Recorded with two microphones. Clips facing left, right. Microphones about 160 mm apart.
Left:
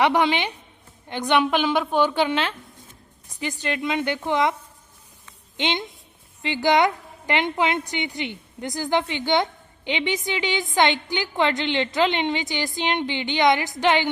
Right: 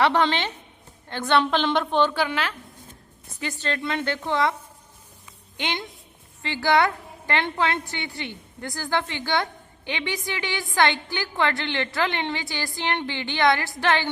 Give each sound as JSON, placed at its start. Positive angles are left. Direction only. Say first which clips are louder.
{"t": 0.0, "sound": "a woman's voice", "louder": "left 1 dB", "side_deg": 10}
{"t": 3.4, "sound": "a woman's voice", "louder": "left 2 dB", "side_deg": 15}
{"t": 5.5, "sound": "a woman's voice", "louder": "left 4 dB", "side_deg": 20}